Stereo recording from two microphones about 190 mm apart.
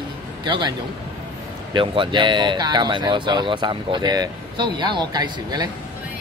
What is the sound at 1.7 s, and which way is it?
Speech, 25° right (ahead or behind).